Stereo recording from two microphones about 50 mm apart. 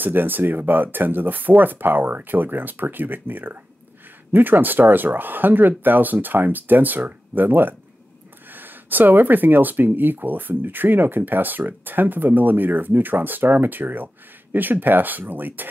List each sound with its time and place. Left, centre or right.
0.0 s speech: right